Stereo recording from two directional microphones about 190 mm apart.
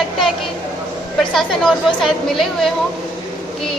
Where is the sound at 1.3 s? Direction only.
Centre (ahead or behind).